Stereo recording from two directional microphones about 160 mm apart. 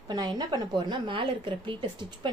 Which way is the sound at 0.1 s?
25° right (ahead or behind).